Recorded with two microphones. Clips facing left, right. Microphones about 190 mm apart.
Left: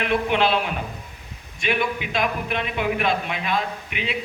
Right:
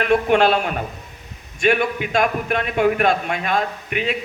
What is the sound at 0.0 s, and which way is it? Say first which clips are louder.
A man's voice: right 5 dB; 45° right (ahead or behind).